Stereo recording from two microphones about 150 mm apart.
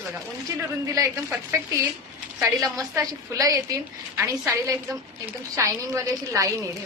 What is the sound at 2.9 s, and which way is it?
A woman's voice, 25° right (ahead or behind).